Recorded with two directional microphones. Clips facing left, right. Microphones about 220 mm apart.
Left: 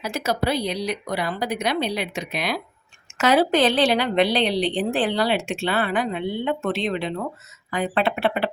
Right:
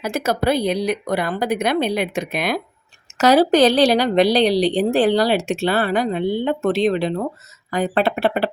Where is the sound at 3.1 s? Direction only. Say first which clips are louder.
Right 5 dB; 40° right (ahead or behind).